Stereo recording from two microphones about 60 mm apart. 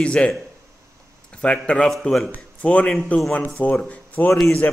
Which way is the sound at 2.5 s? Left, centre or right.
Left.